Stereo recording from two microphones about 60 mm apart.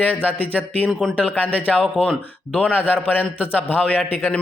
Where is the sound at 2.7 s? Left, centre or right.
Left.